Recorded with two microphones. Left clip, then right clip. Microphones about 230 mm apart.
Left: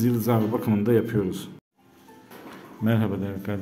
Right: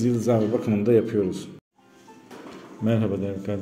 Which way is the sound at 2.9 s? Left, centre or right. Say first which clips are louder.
Right 2 dB; centre.